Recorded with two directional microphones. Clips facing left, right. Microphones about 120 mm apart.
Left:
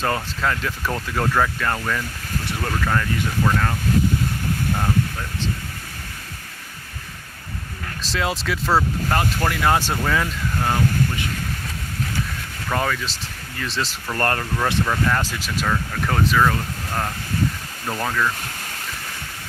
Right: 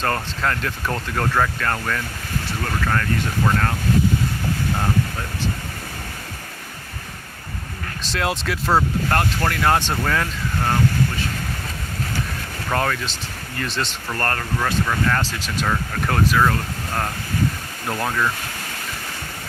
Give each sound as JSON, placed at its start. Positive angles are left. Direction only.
{"t": 0.0, "sound": "speech", "side_deg": 5}
{"t": 3.4, "sound": "speech", "side_deg": 0}
{"t": 8.0, "sound": "speech", "side_deg": 0}
{"t": 12.7, "sound": "speech", "side_deg": 0}
{"t": 14.2, "sound": "speech", "side_deg": 25}
{"t": 14.6, "sound": "speech", "side_deg": 10}
{"t": 15.6, "sound": "speech", "side_deg": -5}